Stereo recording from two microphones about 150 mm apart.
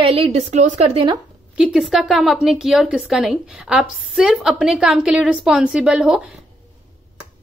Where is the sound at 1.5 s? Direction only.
5° right (ahead or behind).